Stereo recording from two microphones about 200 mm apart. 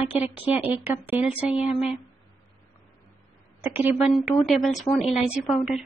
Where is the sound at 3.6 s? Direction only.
10° right (ahead or behind).